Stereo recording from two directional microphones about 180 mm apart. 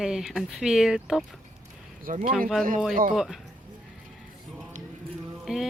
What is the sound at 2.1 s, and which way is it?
Speech, 50° right (ahead or behind).